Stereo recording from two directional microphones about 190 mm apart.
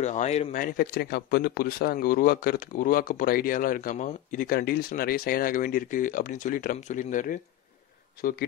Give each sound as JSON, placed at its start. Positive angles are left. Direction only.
{"t": 0.0, "sound": "speech", "side_deg": 40}